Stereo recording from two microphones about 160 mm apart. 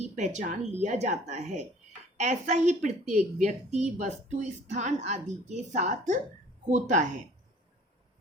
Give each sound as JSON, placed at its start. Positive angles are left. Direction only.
{"t": 0.0, "sound": "a woman's voice", "side_deg": -45}